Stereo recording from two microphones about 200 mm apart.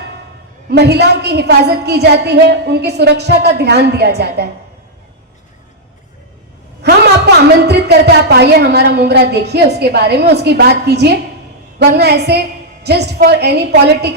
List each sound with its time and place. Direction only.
0.7 s a woman's voice: 55° right (ahead or behind)
6.8 s a woman's voice: 55° right (ahead or behind)